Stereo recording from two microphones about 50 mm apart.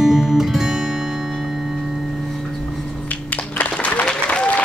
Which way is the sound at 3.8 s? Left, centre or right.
Left.